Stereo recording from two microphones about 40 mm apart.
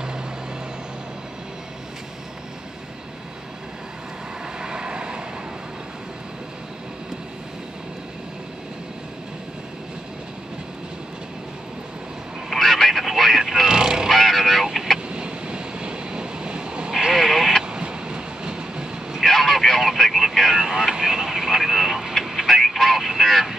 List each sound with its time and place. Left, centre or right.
4.6 s vehicle: centre
12.4 s a sound: centre
14.0 s vehicle: centre
15.0 s vehicle: right
16.9 s radio: centre
17.6 s vehicle: right
19.2 s radio: centre
20.5 s vehicle: centre